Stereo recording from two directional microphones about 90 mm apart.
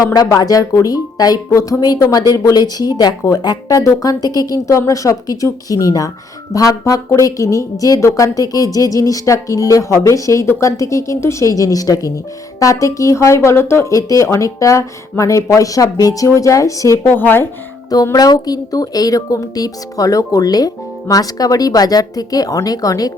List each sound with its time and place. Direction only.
0.0 s speech: 45° left (ahead or behind)
17.1 s speech: 25° left (ahead or behind)
17.9 s speech: 45° left (ahead or behind)